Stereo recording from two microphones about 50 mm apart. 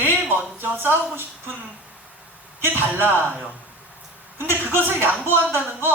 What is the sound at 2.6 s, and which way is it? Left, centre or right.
Speech, right.